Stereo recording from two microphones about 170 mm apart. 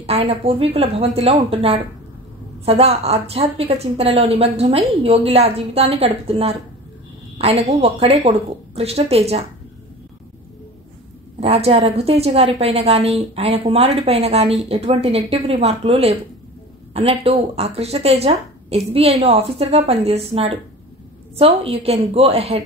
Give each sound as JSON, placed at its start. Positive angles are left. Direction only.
{"t": 0.0, "sound": "a woman's voice", "side_deg": -35}
{"t": 11.3, "sound": "a woman's voice", "side_deg": -35}